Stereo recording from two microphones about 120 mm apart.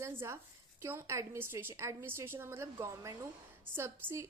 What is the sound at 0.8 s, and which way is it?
A woman's voice, 25° right (ahead or behind).